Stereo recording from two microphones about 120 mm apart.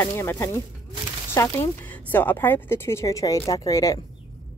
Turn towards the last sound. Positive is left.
turn(degrees=30)  # may be behind; listen again after turning